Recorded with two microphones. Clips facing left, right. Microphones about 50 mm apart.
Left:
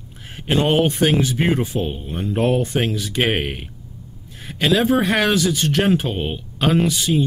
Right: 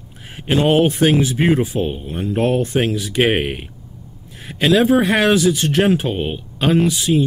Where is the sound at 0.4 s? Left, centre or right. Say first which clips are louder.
Right 3 dB; centre.